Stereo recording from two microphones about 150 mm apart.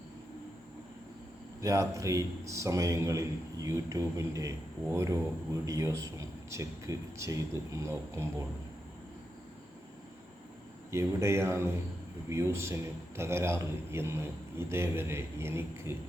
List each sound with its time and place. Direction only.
1.6 s a man's voice: 20° right (ahead or behind)
10.9 s a man's voice: 20° right (ahead or behind)